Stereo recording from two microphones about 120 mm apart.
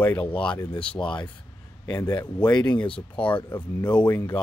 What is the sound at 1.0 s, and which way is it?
A man's voice, 40° left (ahead or behind).